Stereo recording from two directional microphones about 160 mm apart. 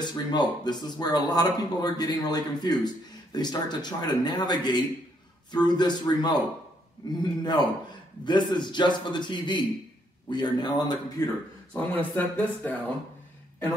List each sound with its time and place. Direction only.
0.0 s speech: 25° left (ahead or behind)
7.4 s speech: 25° left (ahead or behind)
11.7 s speech: 10° left (ahead or behind)